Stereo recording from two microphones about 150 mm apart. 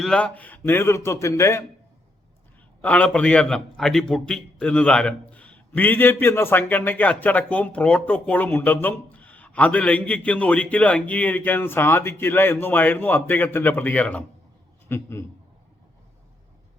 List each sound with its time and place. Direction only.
0.0 s a man's voice: 5° left (ahead or behind); by 1.6 s 20° left (ahead or behind)
2.8 s a man's voice: 10° left (ahead or behind)